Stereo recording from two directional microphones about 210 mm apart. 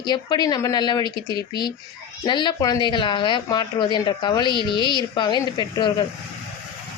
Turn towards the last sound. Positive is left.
turn(degrees=20)  # may be behind; listen again after turning